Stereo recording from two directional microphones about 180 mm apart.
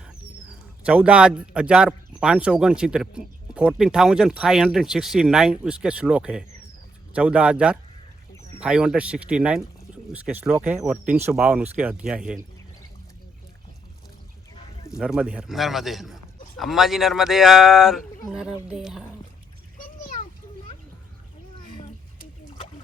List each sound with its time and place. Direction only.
0.9 s speech: 5° right (ahead or behind)
14.8 s speech: 5° right (ahead or behind)
19.8 s splash: 50° left (ahead or behind)